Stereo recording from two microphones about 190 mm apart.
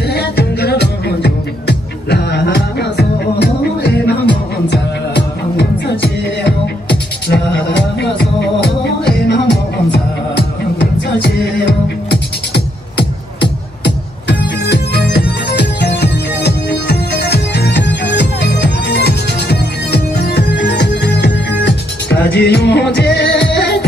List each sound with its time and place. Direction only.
0.0 s music: 60° left (ahead or behind)
12.1 s music: 65° left (ahead or behind)